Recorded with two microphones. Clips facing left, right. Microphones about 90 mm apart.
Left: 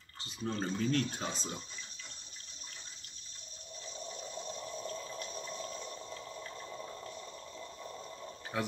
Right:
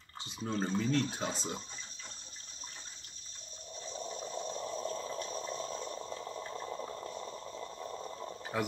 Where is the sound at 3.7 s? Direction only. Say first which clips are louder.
Right 4 dB; 35° right (ahead or behind).